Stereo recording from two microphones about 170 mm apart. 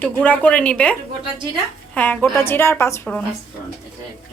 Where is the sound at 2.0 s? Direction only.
10° left (ahead or behind).